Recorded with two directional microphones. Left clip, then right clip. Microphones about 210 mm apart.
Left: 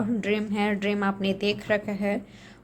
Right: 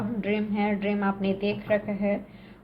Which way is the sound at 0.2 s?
40° left (ahead or behind).